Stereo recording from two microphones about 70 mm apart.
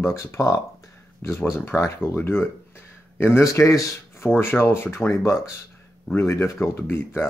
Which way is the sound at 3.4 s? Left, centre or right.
Left.